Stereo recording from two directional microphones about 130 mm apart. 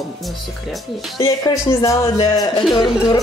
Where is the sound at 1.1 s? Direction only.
25° left (ahead or behind).